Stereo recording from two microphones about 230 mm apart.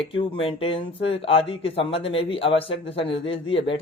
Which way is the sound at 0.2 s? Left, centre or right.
Left.